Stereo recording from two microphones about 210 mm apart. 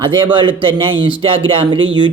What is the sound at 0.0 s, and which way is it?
Speech, 25° right (ahead or behind).